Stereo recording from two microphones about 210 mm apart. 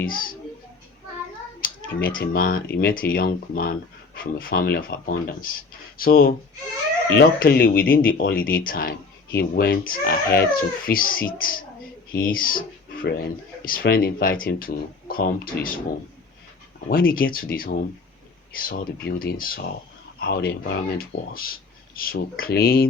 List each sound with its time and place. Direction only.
0.0 s speech: 45° left (ahead or behind)
1.6 s speech: 45° left (ahead or behind)
16.9 s speech: 45° left (ahead or behind)